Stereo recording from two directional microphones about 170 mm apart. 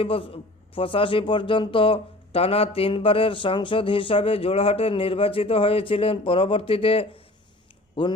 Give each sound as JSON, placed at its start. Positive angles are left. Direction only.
{"t": 0.0, "sound": "speech", "side_deg": 35}